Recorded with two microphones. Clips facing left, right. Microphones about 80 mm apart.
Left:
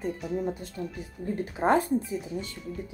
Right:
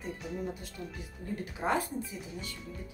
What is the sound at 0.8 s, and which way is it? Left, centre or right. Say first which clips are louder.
Speech: left 7 dB; left.